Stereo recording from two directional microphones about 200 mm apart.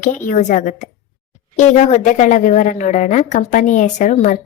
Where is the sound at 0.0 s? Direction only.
40° left (ahead or behind).